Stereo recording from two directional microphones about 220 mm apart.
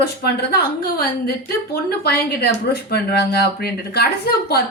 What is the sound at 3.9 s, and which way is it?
Speech, 45° left (ahead or behind).